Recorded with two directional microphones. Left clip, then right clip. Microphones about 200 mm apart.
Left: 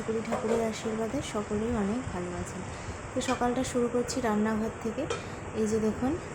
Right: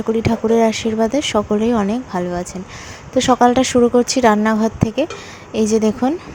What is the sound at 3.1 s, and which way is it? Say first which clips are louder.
Speech: right 17 dB; 40° right (ahead or behind).